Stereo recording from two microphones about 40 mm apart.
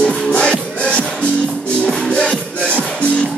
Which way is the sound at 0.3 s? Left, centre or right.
Left.